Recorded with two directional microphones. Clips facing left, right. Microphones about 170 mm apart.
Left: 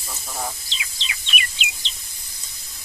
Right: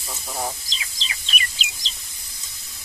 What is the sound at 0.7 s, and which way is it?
Bird, 35° right (ahead or behind).